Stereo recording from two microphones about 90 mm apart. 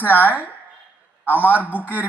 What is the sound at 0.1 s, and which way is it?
A man's voice, 20° left (ahead or behind).